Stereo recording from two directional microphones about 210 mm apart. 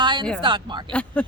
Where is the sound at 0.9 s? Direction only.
5° left (ahead or behind).